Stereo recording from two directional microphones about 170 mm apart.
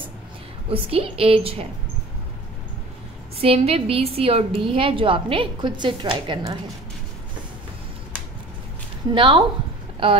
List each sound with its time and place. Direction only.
0.7 s a woman's voice: 35° right (ahead or behind)
3.3 s a woman's voice: 35° right (ahead or behind)
9.1 s a woman's voice: 30° right (ahead or behind)